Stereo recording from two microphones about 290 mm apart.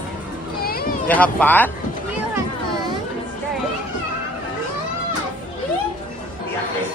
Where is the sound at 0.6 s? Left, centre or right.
Left.